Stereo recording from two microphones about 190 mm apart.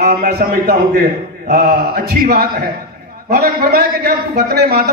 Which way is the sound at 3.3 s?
55° right (ahead or behind).